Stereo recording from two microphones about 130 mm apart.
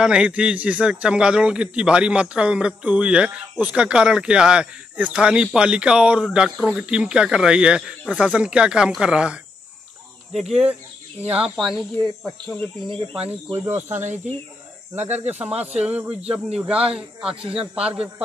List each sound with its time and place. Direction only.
0.0 s a man's voice: 5° right (ahead or behind)
10.4 s speech: 55° right (ahead or behind)
11.2 s speech: 10° right (ahead or behind)
13.7 s a man's voice: 15° right (ahead or behind)
15.0 s speech: 60° right (ahead or behind)
15.2 s a man's voice: 10° right (ahead or behind)